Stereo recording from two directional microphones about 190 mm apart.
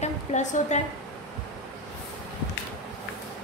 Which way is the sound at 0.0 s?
40° left (ahead or behind).